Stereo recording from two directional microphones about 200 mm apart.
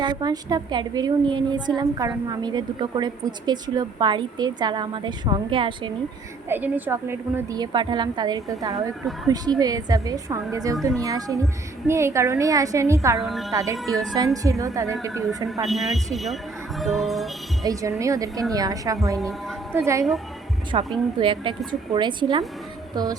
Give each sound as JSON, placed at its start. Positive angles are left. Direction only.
{"t": 0.0, "sound": "a woman's voice", "side_deg": -20}
{"t": 6.5, "sound": "a woman's voice", "side_deg": -10}
{"t": 13.2, "sound": "speech", "side_deg": 0}
{"t": 13.5, "sound": "a woman's voice", "side_deg": -15}
{"t": 15.6, "sound": "speech", "side_deg": 0}
{"t": 16.8, "sound": "music", "side_deg": 0}
{"t": 17.7, "sound": "a woman's voice", "side_deg": -15}
{"t": 20.7, "sound": "a woman's voice", "side_deg": -25}